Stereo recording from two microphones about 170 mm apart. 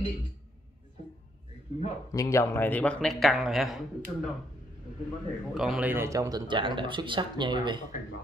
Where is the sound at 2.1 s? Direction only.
20° left (ahead or behind); by 3.8 s centre (ahead or behind).